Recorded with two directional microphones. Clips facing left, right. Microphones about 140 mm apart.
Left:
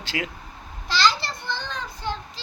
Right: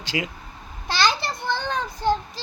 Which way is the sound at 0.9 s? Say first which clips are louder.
Even; 55° right (ahead or behind).